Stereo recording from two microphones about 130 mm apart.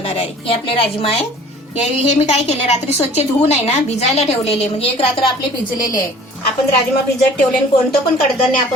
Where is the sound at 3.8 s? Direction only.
55° left (ahead or behind).